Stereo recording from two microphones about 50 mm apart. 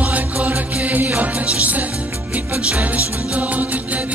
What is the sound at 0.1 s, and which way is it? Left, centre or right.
Music, right.